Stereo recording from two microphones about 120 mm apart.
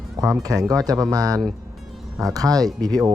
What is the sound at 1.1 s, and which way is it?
Speech, 30° right (ahead or behind).